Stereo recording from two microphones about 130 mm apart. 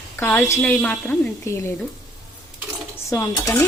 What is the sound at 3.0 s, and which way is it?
Dishes, 25° left (ahead or behind).